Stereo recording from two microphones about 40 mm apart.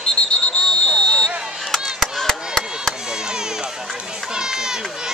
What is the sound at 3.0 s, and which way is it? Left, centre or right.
Chop, centre.